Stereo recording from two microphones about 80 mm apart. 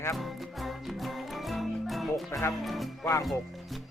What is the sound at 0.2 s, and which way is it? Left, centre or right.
Music, centre.